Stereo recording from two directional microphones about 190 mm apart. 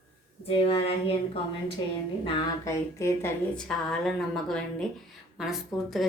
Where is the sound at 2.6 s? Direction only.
15° left (ahead or behind).